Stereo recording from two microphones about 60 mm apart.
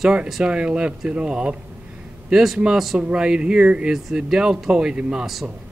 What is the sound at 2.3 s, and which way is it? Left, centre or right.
Speech, centre.